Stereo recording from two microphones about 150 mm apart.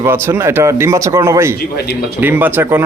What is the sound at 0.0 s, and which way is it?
Speech, 15° right (ahead or behind).